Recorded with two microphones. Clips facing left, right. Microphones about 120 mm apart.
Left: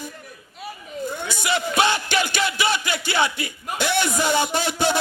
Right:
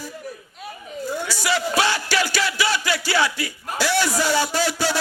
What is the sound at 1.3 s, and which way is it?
Music, 20° left (ahead or behind).